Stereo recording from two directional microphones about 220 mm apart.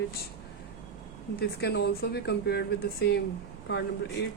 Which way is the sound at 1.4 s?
45° left (ahead or behind).